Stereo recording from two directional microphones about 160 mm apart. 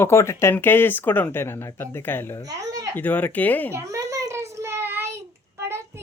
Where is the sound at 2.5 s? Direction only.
20° right (ahead or behind).